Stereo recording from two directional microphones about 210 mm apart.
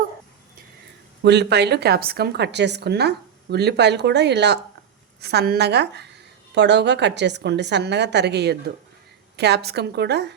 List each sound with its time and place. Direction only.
1.2 s a woman's voice: 55° right (ahead or behind)